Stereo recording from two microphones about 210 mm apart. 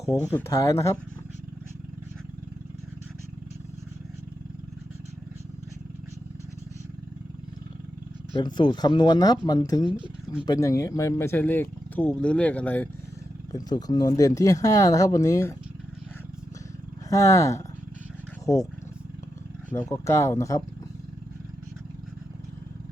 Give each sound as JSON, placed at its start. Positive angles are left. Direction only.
{"t": 0.3, "sound": "speech", "side_deg": 10}
{"t": 8.4, "sound": "speech", "side_deg": 20}
{"t": 13.5, "sound": "speech", "side_deg": 20}
{"t": 17.1, "sound": "speech", "side_deg": 15}
{"t": 19.9, "sound": "speech", "side_deg": 15}